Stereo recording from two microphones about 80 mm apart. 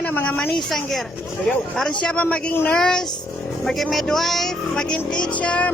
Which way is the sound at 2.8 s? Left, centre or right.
Centre.